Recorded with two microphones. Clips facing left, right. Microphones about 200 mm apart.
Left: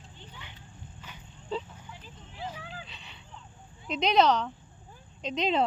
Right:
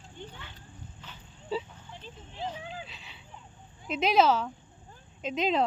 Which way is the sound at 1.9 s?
30° right (ahead or behind).